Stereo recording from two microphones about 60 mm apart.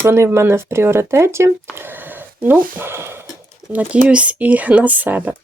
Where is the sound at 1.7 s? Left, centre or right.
Right.